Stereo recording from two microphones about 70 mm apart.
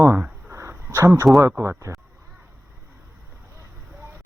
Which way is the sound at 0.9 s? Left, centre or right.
Right.